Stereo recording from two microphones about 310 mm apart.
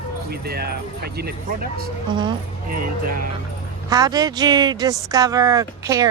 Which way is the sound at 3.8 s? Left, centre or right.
Centre.